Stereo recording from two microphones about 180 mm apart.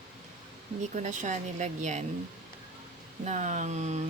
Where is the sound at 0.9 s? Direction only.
45° right (ahead or behind).